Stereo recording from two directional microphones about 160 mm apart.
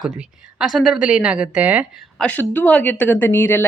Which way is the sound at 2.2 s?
10° left (ahead or behind).